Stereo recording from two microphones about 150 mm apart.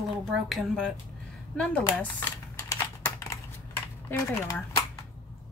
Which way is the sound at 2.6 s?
20° left (ahead or behind).